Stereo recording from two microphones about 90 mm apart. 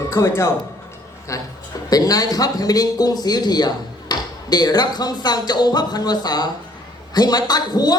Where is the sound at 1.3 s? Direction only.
35° left (ahead or behind).